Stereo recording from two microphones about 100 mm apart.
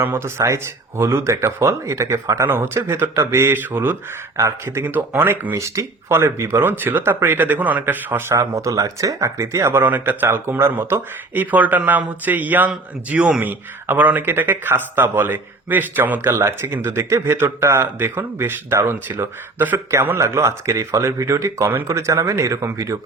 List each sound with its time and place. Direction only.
0.0 s speech: 25° right (ahead or behind)
8.3 s speech: 35° right (ahead or behind)